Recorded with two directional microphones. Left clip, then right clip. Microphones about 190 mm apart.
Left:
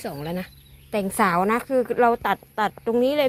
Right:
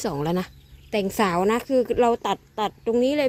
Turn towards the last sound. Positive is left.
turn(degrees=-25)  # may be behind; listen again after turning